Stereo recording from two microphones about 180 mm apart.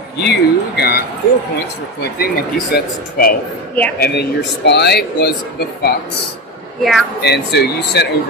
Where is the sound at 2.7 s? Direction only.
55° left (ahead or behind).